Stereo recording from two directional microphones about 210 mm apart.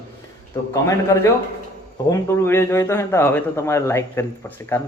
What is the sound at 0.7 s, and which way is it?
A man's voice, 15° left (ahead or behind).